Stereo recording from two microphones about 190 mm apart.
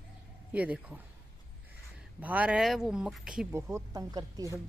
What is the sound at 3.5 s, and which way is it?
Speech, 15° right (ahead or behind).